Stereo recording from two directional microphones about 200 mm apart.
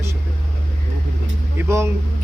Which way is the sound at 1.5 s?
15° right (ahead or behind).